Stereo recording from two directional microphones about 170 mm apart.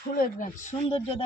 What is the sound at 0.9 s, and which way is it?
Speech, 35° left (ahead or behind).